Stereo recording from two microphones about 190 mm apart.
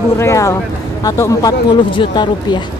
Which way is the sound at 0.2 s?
15° left (ahead or behind).